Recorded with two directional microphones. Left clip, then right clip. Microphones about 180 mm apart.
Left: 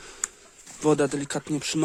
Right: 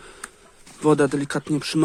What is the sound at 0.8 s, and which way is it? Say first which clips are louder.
Speech: right 4 dB; 10° left (ahead or behind).